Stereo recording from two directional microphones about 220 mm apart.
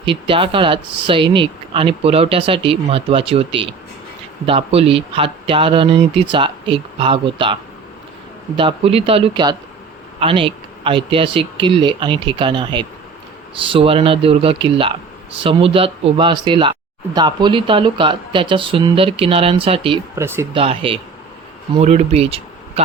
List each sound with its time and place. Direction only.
0.0 s speech: 25° right (ahead or behind)
20.1 s speech: 10° right (ahead or behind)
20.5 s speech: 25° right (ahead or behind)